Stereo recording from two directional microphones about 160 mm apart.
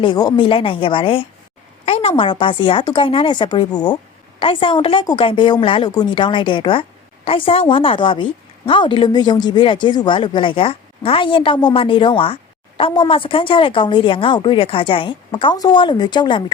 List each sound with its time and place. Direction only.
0.0 s a woman's voice: 30° left (ahead or behind)